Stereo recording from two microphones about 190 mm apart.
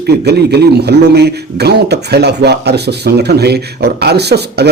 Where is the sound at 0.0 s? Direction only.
60° right (ahead or behind).